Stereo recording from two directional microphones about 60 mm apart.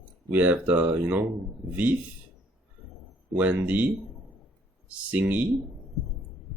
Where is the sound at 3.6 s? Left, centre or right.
Right.